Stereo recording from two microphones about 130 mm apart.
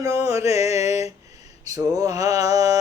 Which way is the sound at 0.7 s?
55° left (ahead or behind).